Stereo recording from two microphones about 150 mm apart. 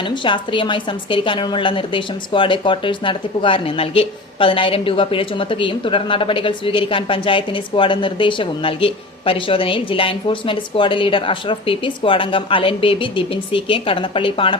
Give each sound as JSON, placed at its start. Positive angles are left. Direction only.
{"t": 0.1, "sound": "a woman's voice", "side_deg": 35}